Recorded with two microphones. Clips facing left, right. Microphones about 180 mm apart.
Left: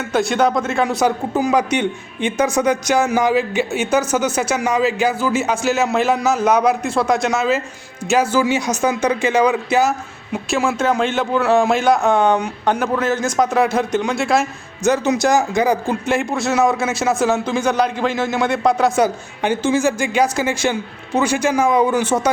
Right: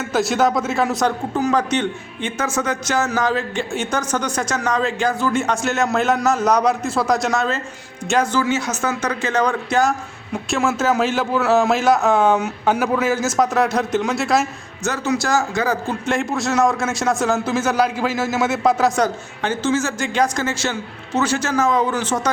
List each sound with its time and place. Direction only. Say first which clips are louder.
0.0 s speech: left 1 dB; 5° right (ahead or behind)
14.8 s speech: left 5 dB; 20° left (ahead or behind)
16.0 s speech: left 1 dB; centre (ahead or behind)